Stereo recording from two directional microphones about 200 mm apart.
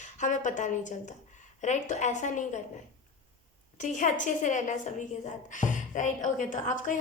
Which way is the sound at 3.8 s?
40° left (ahead or behind).